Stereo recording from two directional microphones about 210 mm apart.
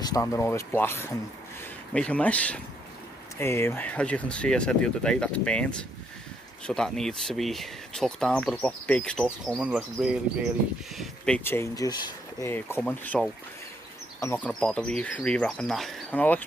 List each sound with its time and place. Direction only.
0.0 s speech: 15° left (ahead or behind)